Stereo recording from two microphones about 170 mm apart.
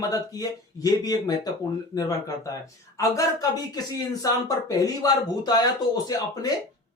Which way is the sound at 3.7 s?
20° left (ahead or behind).